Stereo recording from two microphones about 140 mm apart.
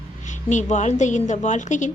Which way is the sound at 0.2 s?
60° left (ahead or behind).